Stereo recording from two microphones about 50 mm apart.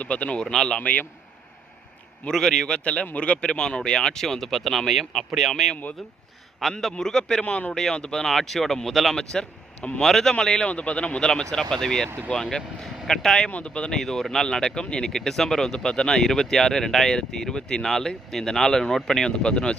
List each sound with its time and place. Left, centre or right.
0.0 s a man's voice: left
0.5 s speech: centre
0.8 s a man's voice: left
2.2 s a man's voice: centre
6.9 s speech: centre
7.4 s a man's voice: left
7.7 s speech: centre
9.1 s a man's voice: centre
10.7 s a man's voice: left
13.5 s a man's voice: left
13.9 s speech: centre